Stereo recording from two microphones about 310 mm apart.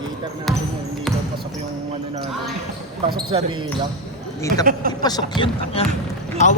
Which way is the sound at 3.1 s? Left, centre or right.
Centre.